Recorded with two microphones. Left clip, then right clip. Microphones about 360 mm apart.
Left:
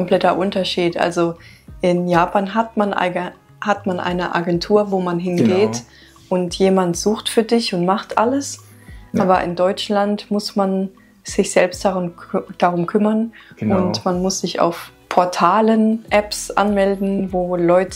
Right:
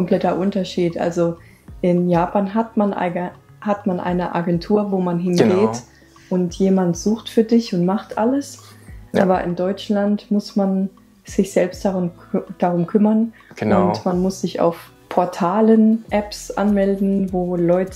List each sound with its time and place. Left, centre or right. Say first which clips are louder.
0.0 s speech: left 3 dB; left